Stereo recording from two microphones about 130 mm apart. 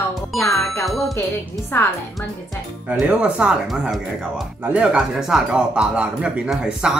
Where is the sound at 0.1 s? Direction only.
Centre (ahead or behind).